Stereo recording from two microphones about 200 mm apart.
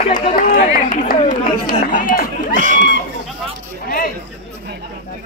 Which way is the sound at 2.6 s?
40° right (ahead or behind).